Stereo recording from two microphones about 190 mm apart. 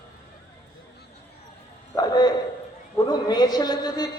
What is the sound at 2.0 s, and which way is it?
A man's voice, 20° left (ahead or behind).